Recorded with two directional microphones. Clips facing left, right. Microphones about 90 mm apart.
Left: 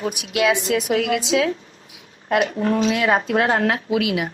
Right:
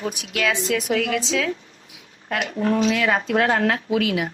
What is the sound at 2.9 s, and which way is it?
A woman's voice, 25° left (ahead or behind).